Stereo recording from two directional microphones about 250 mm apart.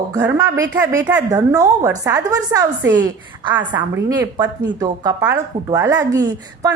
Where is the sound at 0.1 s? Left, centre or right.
Centre.